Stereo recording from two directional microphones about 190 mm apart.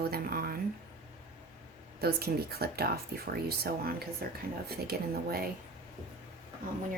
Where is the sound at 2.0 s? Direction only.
55° right (ahead or behind).